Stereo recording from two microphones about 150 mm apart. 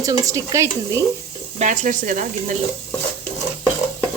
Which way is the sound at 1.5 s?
55° right (ahead or behind).